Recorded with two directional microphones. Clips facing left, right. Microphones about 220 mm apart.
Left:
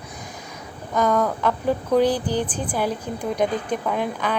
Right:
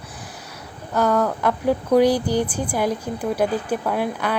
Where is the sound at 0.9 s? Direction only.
10° right (ahead or behind).